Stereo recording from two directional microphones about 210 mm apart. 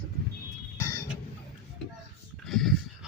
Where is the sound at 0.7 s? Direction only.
15° left (ahead or behind).